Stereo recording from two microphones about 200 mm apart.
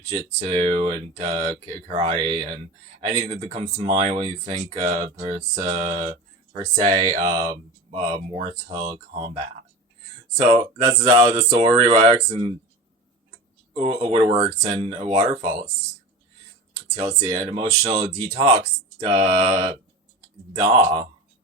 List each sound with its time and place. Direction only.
0.3 s speech: 25° right (ahead or behind)
7.0 s speech: 35° right (ahead or behind)
7.3 s speech: 20° right (ahead or behind)
13.7 s speech: 30° right (ahead or behind)
15.4 s speech: 35° right (ahead or behind)
17.1 s speech: 25° right (ahead or behind)